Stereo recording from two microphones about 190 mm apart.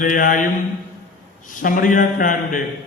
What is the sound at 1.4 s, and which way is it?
A man's voice, 45° left (ahead or behind).